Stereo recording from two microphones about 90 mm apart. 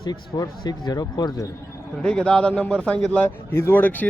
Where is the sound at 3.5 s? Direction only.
25° left (ahead or behind).